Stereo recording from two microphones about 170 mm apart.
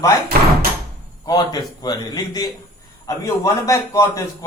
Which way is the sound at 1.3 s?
25° left (ahead or behind).